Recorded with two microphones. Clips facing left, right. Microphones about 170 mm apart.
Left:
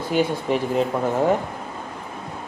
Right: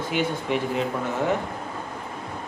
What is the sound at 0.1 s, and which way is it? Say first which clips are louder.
Speech: left 5 dB; 35° left (ahead or behind).